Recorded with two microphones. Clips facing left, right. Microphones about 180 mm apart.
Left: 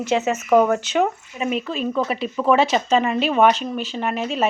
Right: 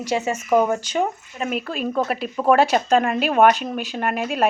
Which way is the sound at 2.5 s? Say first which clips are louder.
Right 1 dB; 50° right (ahead or behind).